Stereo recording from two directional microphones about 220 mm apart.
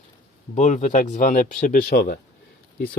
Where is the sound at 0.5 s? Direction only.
35° left (ahead or behind).